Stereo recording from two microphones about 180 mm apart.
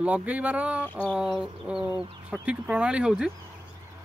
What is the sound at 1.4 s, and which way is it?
Speech, 5° right (ahead or behind).